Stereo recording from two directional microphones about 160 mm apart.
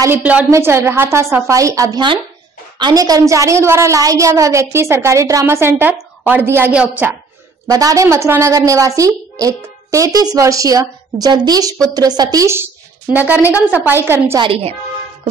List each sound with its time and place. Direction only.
0.0 s a woman's voice: 10° right (ahead or behind)
7.6 s a woman's voice: 25° right (ahead or behind)
13.4 s a woman's voice: 15° left (ahead or behind)
13.7 s a woman's voice: 10° right (ahead or behind)
14.4 s speech: 35° right (ahead or behind)